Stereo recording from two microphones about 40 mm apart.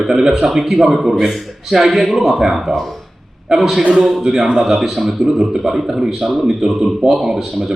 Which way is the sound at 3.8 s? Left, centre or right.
Right.